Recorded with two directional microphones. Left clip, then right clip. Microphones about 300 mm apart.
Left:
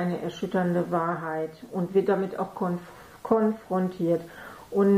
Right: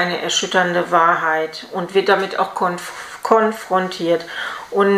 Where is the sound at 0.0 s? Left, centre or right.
Centre.